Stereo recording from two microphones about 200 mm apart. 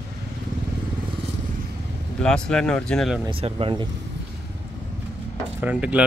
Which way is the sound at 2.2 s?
5° left (ahead or behind).